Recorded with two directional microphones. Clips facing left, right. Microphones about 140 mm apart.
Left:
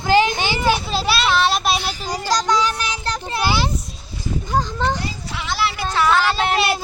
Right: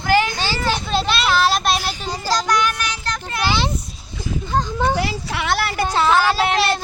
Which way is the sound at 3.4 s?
10° left (ahead or behind).